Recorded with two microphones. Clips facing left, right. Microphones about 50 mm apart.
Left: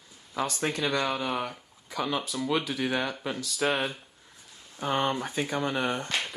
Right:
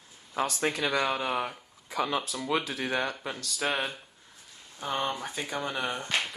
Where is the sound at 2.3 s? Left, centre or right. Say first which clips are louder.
Left 1 dB; centre.